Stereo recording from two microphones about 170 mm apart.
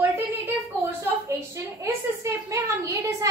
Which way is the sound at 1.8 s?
15° right (ahead or behind).